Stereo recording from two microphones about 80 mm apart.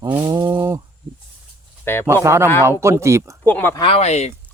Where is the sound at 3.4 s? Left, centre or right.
Left.